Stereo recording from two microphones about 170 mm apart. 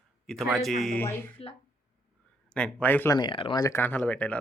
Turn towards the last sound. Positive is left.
turn(degrees=10)  # may be behind; listen again after turning